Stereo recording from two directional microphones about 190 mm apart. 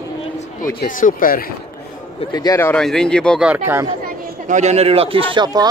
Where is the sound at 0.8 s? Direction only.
45° left (ahead or behind).